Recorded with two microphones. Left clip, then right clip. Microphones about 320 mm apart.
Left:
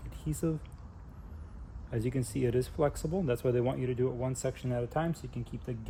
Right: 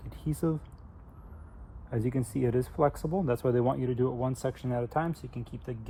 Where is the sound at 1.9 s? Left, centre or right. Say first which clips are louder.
Right 2 dB; centre.